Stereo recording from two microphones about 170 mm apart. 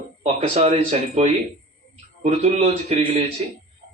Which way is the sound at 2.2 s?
40° right (ahead or behind).